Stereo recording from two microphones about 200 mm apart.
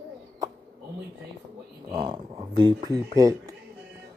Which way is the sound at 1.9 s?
20° right (ahead or behind).